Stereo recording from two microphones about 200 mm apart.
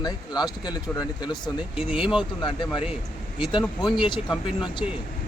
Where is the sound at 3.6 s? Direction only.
Centre (ahead or behind).